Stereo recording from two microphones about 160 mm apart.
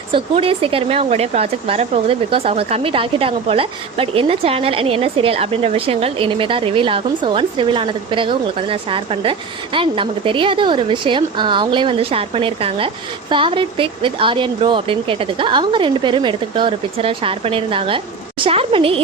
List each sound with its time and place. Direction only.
0.1 s a woman's voice: 35° right (ahead or behind)